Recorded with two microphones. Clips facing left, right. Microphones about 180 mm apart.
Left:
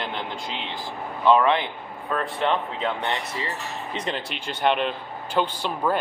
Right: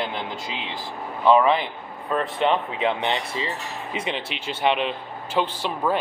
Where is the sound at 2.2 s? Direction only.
20° right (ahead or behind).